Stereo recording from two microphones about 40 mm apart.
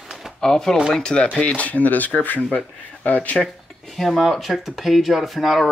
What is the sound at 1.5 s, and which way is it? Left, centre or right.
Speech, left.